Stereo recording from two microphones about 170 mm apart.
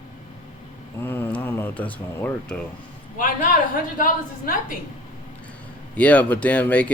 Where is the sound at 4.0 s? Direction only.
55° left (ahead or behind).